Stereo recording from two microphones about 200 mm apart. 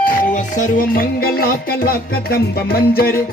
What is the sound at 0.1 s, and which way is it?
Music, 40° left (ahead or behind).